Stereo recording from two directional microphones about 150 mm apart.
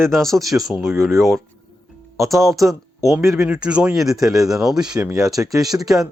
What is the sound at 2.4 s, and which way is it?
Speech, centre (ahead or behind).